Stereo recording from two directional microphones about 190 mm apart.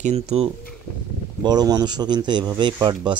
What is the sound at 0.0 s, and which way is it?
Speech, 35° right (ahead or behind).